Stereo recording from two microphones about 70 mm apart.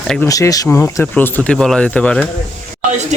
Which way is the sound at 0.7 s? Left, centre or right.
Left.